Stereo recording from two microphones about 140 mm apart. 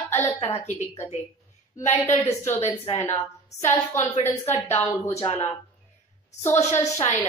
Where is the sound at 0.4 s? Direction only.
45° left (ahead or behind).